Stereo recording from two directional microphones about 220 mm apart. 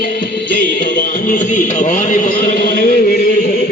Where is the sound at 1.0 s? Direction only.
35° left (ahead or behind).